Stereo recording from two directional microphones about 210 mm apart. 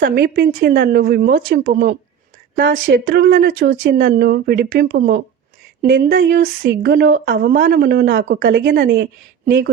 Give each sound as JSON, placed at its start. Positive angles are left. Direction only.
{"t": 0.0, "sound": "speech", "side_deg": -50}
{"t": 8.4, "sound": "speech", "side_deg": -60}